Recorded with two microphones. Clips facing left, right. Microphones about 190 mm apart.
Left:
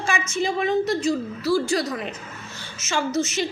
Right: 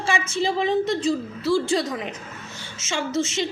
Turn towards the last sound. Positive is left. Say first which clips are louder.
# left 1 dB
turn(degrees=-25)  # may be behind; listen again after turning